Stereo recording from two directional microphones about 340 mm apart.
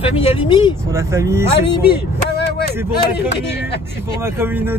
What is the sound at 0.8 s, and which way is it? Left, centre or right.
Speech, centre.